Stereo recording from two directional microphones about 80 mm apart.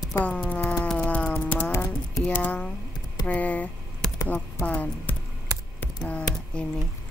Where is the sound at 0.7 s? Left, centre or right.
Centre.